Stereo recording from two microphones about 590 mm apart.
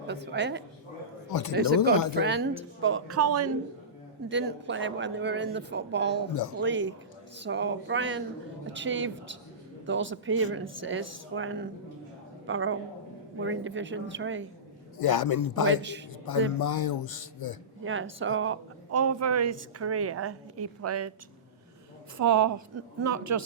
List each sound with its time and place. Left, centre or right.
0.1 s speech: centre
1.3 s speech: left
1.5 s a woman's voice: centre
14.9 s speech: left
15.6 s speech: centre
16.5 s speech: left
17.8 s a woman's voice: centre
22.2 s a woman's voice: right